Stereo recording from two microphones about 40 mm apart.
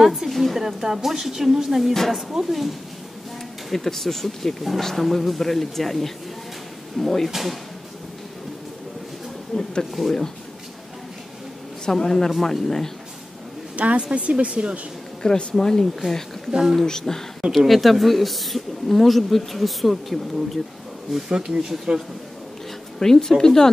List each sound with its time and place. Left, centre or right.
0.0 s a woman's voice: centre
3.7 s speech: centre
9.5 s a woman's voice: centre
11.8 s a woman's voice: centre
13.7 s a woman's voice: right
15.5 s a woman's voice: centre
16.5 s speech: centre
16.8 s a woman's voice: centre
17.5 s speech: centre
21.5 s speech: centre
22.9 s a woman's voice: centre